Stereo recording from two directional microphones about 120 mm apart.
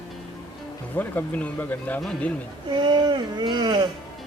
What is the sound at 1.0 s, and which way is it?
Speech, 15° left (ahead or behind).